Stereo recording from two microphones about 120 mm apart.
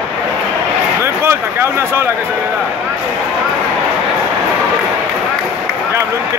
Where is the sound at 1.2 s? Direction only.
20° right (ahead or behind).